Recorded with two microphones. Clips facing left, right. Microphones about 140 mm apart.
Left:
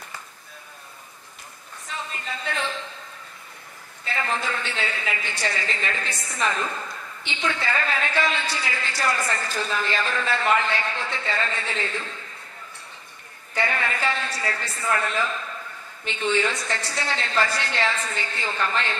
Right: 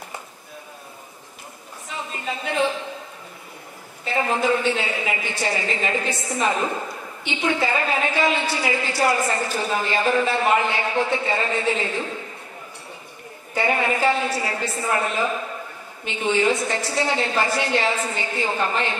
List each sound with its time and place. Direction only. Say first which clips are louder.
2.3 s a woman's voice: right 7 dB; 20° right (ahead or behind)
4.1 s a woman's voice: right 7 dB; 20° right (ahead or behind)
13.6 s a woman's voice: right 5 dB; 20° right (ahead or behind)